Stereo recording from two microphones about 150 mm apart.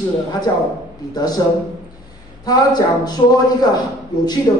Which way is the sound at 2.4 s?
25° left (ahead or behind).